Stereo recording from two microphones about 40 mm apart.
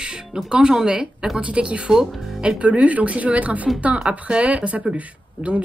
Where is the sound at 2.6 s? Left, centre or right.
Right.